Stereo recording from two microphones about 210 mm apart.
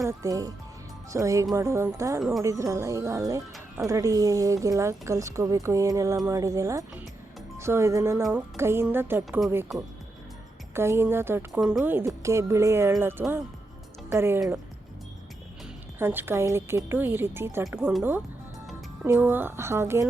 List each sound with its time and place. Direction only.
0.0 s speech: 15° right (ahead or behind)
10.8 s speech: 10° right (ahead or behind)
16.0 s speech: 10° right (ahead or behind)